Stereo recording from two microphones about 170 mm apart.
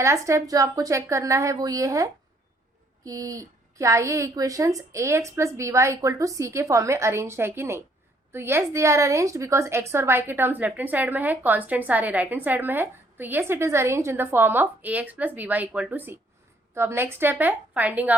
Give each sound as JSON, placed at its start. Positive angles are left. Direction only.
{"t": 0.0, "sound": "a woman's voice", "side_deg": -15}